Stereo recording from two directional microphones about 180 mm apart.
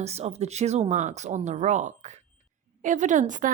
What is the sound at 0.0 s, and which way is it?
A woman's voice, 35° right (ahead or behind).